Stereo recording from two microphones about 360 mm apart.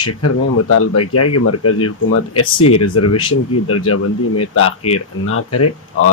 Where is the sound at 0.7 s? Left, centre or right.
Left.